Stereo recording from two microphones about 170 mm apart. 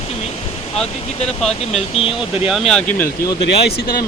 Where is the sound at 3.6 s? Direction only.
65° left (ahead or behind).